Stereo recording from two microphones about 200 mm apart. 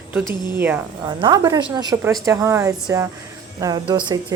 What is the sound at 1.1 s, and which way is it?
Speech, 20° right (ahead or behind).